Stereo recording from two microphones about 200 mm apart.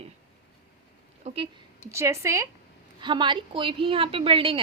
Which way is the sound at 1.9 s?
15° right (ahead or behind).